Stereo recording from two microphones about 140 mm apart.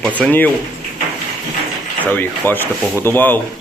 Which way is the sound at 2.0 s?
10° left (ahead or behind).